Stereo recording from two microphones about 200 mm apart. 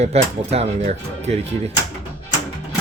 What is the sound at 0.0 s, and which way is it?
Speech, 30° right (ahead or behind).